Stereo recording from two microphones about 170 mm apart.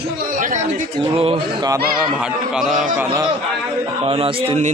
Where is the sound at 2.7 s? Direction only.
50° right (ahead or behind).